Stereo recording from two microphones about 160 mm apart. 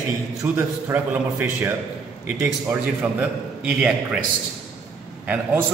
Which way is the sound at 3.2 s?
5° right (ahead or behind).